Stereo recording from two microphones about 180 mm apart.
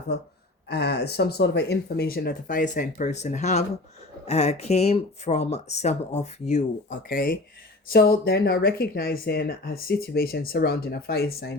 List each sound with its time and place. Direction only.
0.7 s speech: 65° left (ahead or behind)